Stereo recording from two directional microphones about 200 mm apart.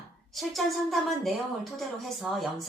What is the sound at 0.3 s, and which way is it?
Speech, centre (ahead or behind).